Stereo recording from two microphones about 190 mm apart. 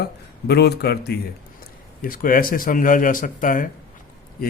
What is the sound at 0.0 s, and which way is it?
Speech, 55° left (ahead or behind).